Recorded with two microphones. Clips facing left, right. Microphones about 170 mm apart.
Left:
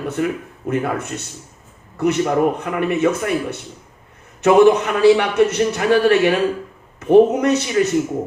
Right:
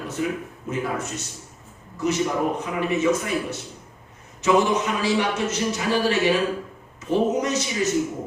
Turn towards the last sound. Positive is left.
turn(degrees=60)  # may be behind; listen again after turning